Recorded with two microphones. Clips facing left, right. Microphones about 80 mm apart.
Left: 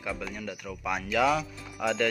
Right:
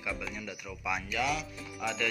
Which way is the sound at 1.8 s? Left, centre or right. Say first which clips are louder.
Left 6 dB; left.